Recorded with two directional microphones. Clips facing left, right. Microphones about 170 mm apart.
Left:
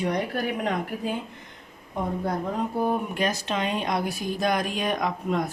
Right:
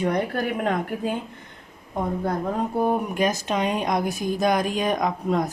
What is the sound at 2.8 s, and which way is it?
Speech, 50° right (ahead or behind).